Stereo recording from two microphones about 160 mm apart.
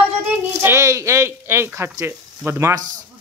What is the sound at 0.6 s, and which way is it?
Speech, 15° right (ahead or behind).